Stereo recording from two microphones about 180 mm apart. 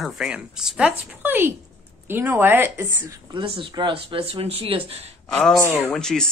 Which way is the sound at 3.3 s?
30° right (ahead or behind).